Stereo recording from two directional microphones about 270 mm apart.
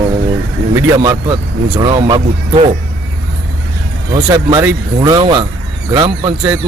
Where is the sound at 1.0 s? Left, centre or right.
Centre.